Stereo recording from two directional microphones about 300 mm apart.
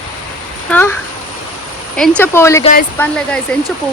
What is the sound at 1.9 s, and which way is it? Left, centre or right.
Speech, centre.